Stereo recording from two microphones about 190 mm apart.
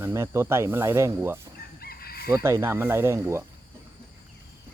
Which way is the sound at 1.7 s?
55° left (ahead or behind).